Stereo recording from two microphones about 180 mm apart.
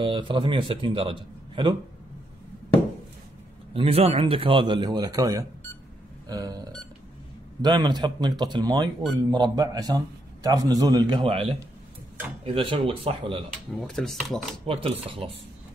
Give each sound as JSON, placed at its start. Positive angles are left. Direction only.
{"t": 0.0, "sound": "a man's voice", "side_deg": -30}
{"t": 3.7, "sound": "a man's voice", "side_deg": -30}
{"t": 7.6, "sound": "a man's voice", "side_deg": -25}
{"t": 12.5, "sound": "a man's voice", "side_deg": -30}
{"t": 13.7, "sound": "speech", "side_deg": 0}
{"t": 14.7, "sound": "speech", "side_deg": -30}